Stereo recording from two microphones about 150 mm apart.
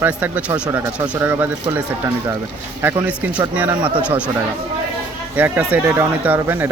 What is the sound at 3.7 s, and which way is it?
Speech, 30° right (ahead or behind).